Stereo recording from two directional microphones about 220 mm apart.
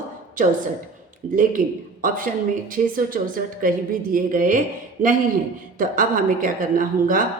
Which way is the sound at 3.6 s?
40° right (ahead or behind).